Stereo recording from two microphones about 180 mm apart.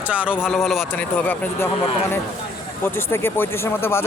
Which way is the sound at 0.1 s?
5° right (ahead or behind).